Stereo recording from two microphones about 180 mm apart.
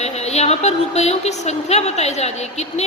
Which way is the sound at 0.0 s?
35° left (ahead or behind).